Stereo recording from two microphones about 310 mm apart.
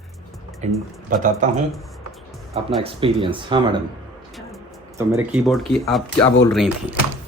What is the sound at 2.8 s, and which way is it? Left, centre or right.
Speech, centre.